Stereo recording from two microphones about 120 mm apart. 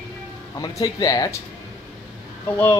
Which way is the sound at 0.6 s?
30° left (ahead or behind).